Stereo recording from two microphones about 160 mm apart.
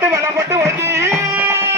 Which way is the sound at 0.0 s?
15° right (ahead or behind).